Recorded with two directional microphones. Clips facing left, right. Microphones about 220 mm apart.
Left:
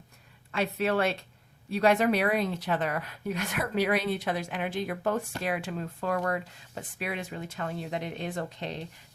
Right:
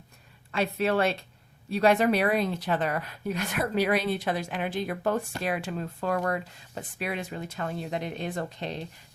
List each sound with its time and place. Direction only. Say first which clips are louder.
0.5 s speech: right 2 dB; 30° right (ahead or behind)